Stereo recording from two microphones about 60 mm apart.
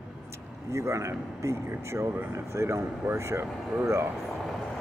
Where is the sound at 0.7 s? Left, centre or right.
Right.